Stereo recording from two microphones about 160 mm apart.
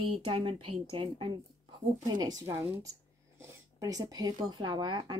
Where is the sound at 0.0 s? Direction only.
35° right (ahead or behind).